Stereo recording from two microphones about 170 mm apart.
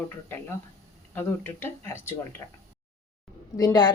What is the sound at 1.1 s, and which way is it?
Speech, 15° left (ahead or behind).